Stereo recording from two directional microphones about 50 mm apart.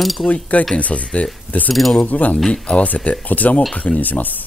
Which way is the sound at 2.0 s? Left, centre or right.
Left.